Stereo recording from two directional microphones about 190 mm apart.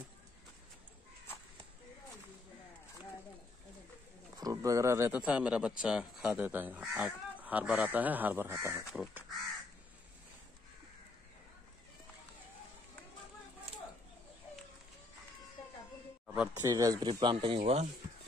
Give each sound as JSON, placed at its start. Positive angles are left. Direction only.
{"t": 4.4, "sound": "speech", "side_deg": -15}
{"t": 16.6, "sound": "speech", "side_deg": -20}